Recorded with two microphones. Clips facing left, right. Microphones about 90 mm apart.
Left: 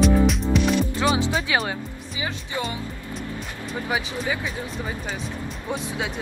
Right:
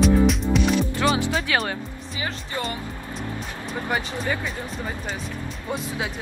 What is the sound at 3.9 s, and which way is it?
Speech, 5° left (ahead or behind).